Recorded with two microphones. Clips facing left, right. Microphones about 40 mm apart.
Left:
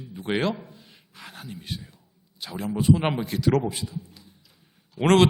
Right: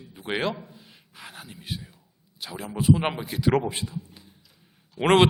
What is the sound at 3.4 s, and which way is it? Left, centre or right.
Speech, centre.